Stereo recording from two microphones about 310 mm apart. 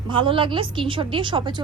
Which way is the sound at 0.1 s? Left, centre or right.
Centre.